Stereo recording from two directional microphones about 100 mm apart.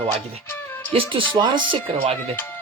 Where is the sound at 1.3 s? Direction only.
50° right (ahead or behind); by 2.2 s 70° right (ahead or behind).